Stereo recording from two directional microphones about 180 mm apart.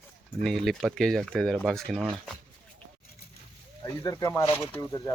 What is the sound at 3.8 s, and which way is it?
Speech, 20° left (ahead or behind).